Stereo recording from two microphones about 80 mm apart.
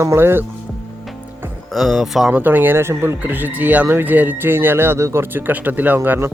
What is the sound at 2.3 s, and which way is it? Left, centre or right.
Speech, right.